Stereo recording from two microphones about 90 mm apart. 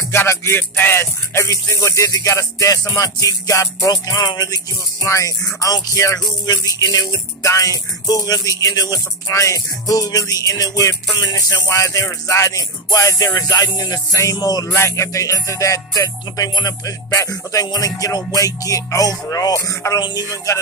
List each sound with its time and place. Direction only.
0.1 s music: 30° left (ahead or behind); by 4.6 s 50° left (ahead or behind)
5.0 s music: 35° left (ahead or behind)
14.7 s music: 30° left (ahead or behind)
20.0 s music: 50° left (ahead or behind)